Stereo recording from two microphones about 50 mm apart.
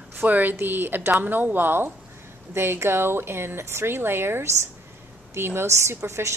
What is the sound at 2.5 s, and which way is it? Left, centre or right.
Speech, right.